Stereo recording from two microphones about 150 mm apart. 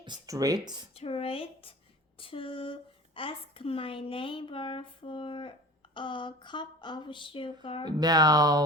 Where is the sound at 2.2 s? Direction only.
35° left (ahead or behind).